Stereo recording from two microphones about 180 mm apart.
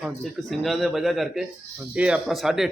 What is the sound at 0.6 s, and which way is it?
Speech, centre (ahead or behind).